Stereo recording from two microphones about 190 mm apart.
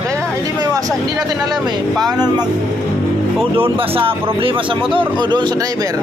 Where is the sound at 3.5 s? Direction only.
30° right (ahead or behind).